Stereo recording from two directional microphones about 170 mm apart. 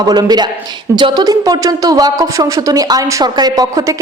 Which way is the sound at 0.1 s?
25° right (ahead or behind).